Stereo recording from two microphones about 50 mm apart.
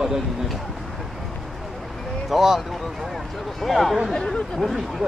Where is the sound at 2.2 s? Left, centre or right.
Centre.